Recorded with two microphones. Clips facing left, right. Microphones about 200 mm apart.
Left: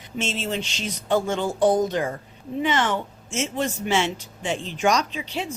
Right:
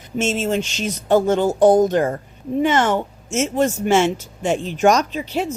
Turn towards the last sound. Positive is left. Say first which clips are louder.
# right 7 dB
turn(degrees=-45)  # may be behind; listen again after turning